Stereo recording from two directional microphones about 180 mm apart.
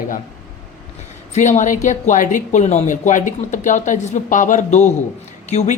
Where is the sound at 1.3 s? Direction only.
45° left (ahead or behind).